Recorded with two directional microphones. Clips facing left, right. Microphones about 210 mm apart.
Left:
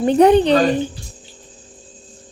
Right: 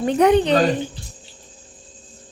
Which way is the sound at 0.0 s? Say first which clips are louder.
Left 4 dB; 30° left (ahead or behind).